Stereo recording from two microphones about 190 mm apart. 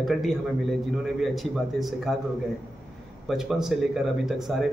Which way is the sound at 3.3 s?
Centre (ahead or behind).